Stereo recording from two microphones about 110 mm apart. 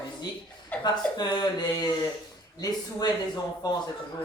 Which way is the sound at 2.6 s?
35° left (ahead or behind).